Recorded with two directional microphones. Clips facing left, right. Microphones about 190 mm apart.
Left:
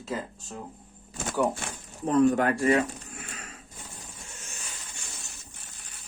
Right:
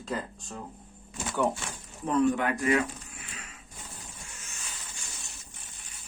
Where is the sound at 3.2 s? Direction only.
45° left (ahead or behind).